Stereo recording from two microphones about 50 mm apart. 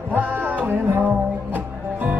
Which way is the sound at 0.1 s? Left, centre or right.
Right.